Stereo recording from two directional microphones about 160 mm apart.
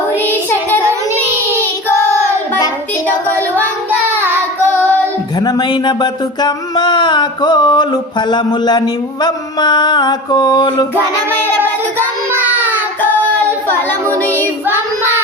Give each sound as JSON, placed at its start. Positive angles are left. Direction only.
{"t": 0.3, "sound": "child singing", "side_deg": 10}
{"t": 4.1, "sound": "child singing", "side_deg": -15}
{"t": 5.4, "sound": "a sound", "side_deg": 25}
{"t": 11.3, "sound": "child singing", "side_deg": -15}